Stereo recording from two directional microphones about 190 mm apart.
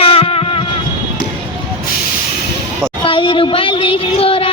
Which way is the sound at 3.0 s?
25° left (ahead or behind).